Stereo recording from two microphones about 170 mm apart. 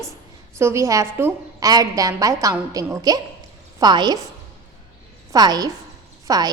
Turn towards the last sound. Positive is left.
turn(degrees=-20)  # may be behind; listen again after turning